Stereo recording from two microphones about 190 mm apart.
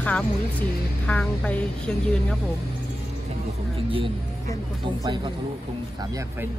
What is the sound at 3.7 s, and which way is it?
Music, 30° right (ahead or behind).